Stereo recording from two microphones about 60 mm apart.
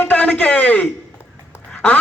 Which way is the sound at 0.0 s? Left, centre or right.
Left.